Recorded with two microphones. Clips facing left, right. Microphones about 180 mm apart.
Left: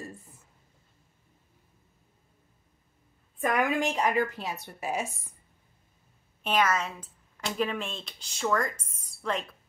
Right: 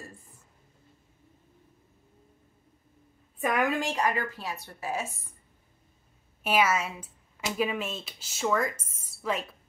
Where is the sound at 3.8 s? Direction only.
20° left (ahead or behind).